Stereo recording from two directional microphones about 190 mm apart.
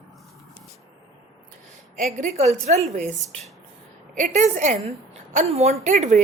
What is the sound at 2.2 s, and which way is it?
Speech, 35° right (ahead or behind).